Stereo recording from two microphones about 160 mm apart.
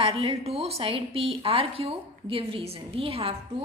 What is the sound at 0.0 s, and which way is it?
A woman's voice, 35° right (ahead or behind).